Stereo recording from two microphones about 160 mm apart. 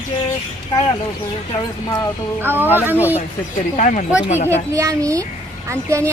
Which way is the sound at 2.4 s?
15° right (ahead or behind).